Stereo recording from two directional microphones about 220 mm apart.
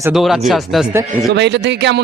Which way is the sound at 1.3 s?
50° right (ahead or behind).